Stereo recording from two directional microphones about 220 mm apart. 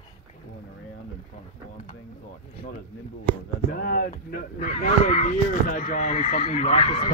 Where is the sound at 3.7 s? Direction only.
40° left (ahead or behind).